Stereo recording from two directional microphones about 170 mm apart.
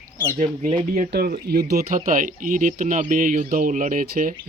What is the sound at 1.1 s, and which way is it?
Speech, 65° right (ahead or behind).